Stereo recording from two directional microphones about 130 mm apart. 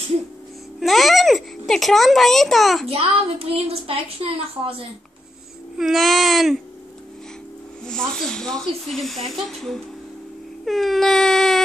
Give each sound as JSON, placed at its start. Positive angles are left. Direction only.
{"t": 0.7, "sound": "a child's voice", "side_deg": 0}
{"t": 2.9, "sound": "a woman's voice", "side_deg": -50}
{"t": 5.8, "sound": "speech", "side_deg": 0}
{"t": 7.8, "sound": "speech", "side_deg": 5}